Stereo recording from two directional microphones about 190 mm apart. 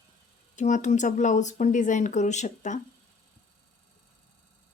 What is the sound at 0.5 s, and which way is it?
Speech, 40° left (ahead or behind).